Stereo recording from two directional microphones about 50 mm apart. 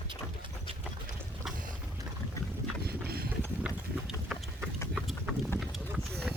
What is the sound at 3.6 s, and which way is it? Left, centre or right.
Clip-clop, centre.